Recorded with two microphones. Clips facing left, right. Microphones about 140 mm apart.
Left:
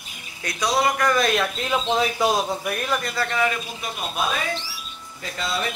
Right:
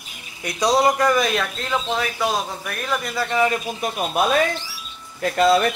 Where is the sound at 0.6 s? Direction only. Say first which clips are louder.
Right 4 dB; 35° right (ahead or behind).